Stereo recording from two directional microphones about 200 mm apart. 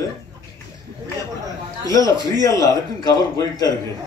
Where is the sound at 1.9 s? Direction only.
15° left (ahead or behind).